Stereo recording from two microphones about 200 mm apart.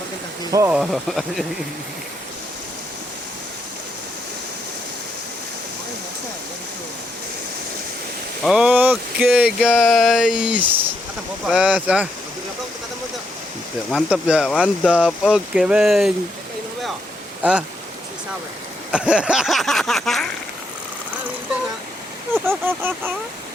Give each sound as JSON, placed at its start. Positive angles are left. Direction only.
{"t": 0.5, "sound": "a sound", "side_deg": -15}
{"t": 0.8, "sound": "speech", "side_deg": 0}
{"t": 8.4, "sound": "speech", "side_deg": -5}
{"t": 13.9, "sound": "speech", "side_deg": -5}
{"t": 18.9, "sound": "speech", "side_deg": -5}
{"t": 22.4, "sound": "a sound", "side_deg": -10}